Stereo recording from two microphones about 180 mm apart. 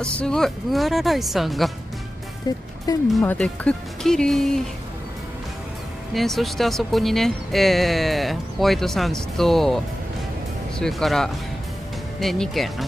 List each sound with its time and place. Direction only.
0.0 s speech: 5° left (ahead or behind)
2.4 s speech: 20° left (ahead or behind)
3.3 s speech: 5° left (ahead or behind)
6.1 s speech: centre (ahead or behind)
10.8 s speech: centre (ahead or behind)